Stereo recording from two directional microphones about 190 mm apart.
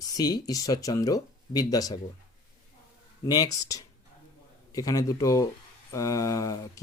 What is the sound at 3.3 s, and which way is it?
Speech, 20° left (ahead or behind).